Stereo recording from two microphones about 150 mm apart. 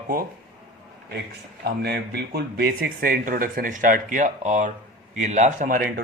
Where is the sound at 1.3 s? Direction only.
90° right.